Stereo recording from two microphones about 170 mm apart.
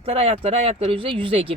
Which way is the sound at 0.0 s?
35° right (ahead or behind).